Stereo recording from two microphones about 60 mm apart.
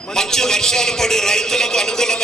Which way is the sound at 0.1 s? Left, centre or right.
Centre.